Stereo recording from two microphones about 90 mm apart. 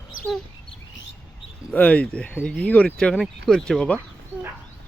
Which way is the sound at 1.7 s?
20° left (ahead or behind).